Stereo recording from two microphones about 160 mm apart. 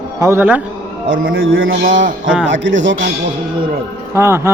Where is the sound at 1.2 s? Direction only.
60° right (ahead or behind).